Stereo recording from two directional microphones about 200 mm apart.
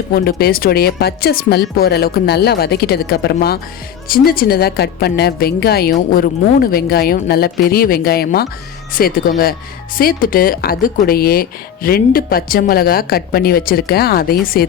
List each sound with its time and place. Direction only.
0.1 s speech: 50° left (ahead or behind)